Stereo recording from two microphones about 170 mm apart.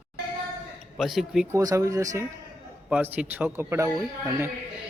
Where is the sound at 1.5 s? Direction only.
20° right (ahead or behind).